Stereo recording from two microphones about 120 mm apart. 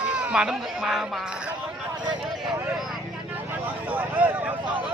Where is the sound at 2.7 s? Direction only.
5° right (ahead or behind).